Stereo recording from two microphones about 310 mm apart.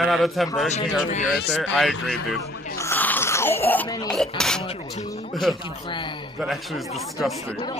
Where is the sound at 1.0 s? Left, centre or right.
Left.